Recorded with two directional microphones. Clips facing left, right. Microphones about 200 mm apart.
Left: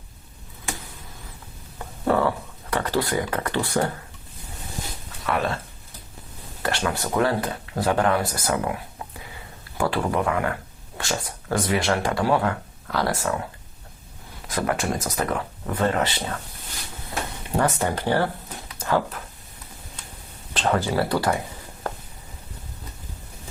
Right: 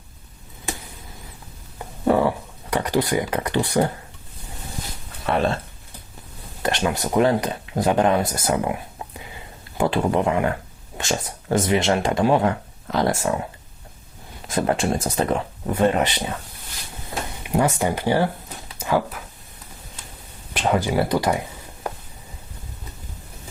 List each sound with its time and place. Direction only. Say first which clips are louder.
2.0 s speech: right 3 dB; 15° right (ahead or behind)
5.2 s speech: right 4 dB; 30° right (ahead or behind)
6.6 s speech: right 3 dB; 20° right (ahead or behind)
14.4 s speech: right 3 dB; 25° right (ahead or behind)
17.4 s speech: right 3 dB; 10° right (ahead or behind)
20.5 s speech: right 2 dB; 15° right (ahead or behind)
21.8 s a sound: right 1 dB; 15° right (ahead or behind)